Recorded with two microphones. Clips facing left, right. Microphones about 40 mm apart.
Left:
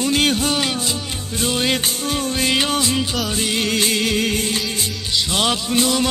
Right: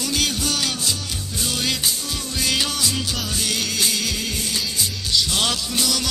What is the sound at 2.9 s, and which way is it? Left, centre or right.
Music, centre.